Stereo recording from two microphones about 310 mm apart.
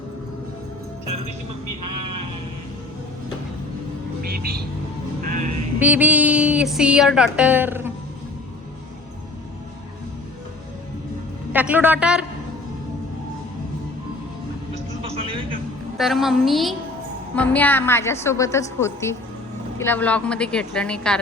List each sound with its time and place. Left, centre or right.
1.8 s sheep: right
4.3 s music: right
5.8 s music: centre
11.5 s music: centre
15.0 s music: centre
16.0 s music: centre
17.3 s a woman's voice: centre
19.8 s music: centre